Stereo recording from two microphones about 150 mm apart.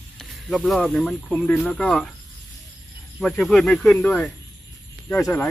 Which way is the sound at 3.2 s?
Centre (ahead or behind).